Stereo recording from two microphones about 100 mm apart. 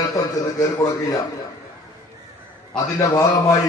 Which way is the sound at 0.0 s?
35° left (ahead or behind).